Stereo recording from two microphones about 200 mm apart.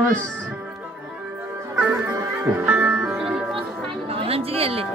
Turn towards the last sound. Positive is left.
turn(degrees=-30)  # may be behind; listen again after turning